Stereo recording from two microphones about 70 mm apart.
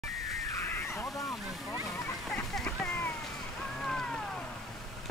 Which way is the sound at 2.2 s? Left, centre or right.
Centre.